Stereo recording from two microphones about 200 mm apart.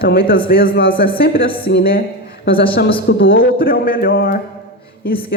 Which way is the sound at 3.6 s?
45° left (ahead or behind).